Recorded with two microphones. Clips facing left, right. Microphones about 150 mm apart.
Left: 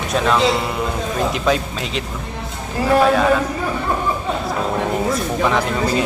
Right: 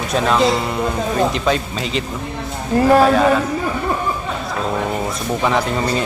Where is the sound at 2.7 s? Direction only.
55° right (ahead or behind).